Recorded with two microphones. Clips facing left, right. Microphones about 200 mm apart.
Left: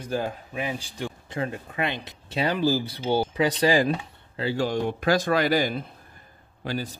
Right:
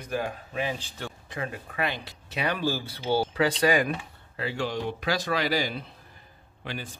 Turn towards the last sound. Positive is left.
turn(degrees=40)  # may be behind; listen again after turning